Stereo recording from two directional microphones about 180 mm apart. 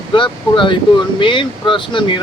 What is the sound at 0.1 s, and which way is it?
Speech, 25° left (ahead or behind).